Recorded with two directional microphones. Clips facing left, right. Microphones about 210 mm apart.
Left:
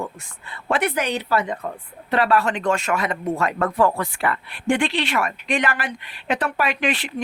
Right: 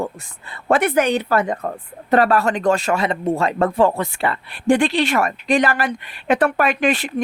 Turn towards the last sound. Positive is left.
turn(degrees=-45)  # may be behind; listen again after turning